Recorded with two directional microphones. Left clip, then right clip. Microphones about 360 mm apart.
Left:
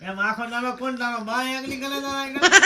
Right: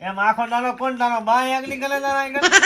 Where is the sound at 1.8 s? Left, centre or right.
Centre.